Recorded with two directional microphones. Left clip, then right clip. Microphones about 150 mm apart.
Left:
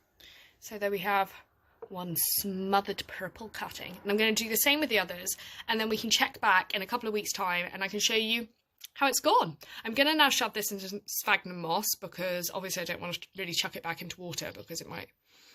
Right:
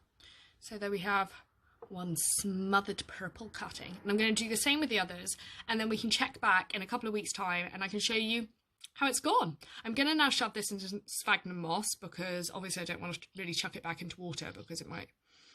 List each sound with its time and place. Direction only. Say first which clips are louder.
0.7 s speech: left 4 dB; 25° right (ahead or behind)
2.1 s a sound: left 2 dB; 30° right (ahead or behind)
2.6 s speech: left 3 dB; 25° right (ahead or behind)